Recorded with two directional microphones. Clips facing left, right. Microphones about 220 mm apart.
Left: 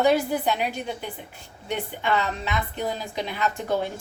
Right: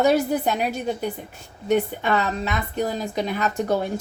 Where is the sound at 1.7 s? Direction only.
45° right (ahead or behind).